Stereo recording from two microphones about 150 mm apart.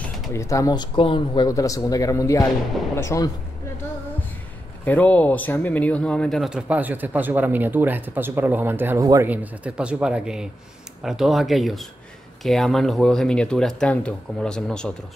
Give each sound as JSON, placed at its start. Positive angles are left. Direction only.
{"t": 0.3, "sound": "speech", "side_deg": 20}
{"t": 4.8, "sound": "speech", "side_deg": 10}
{"t": 9.3, "sound": "speech", "side_deg": -10}